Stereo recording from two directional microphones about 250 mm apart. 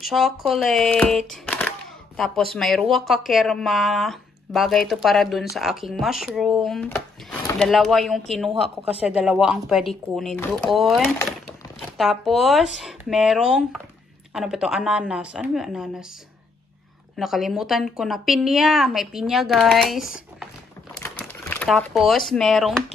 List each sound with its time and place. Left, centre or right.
0.0 s speech: centre
17.2 s speech: centre
21.0 s crumpling: centre
22.3 s speech: centre